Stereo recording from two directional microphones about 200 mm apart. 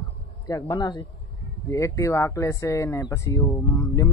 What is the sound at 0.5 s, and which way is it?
Speech, 15° left (ahead or behind).